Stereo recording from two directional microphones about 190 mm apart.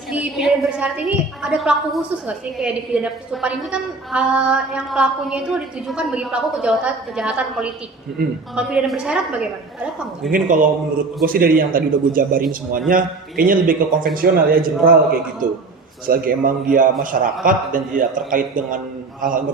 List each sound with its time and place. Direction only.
0.1 s a woman's voice: 5° right (ahead or behind)
10.3 s a man's voice: 45° right (ahead or behind)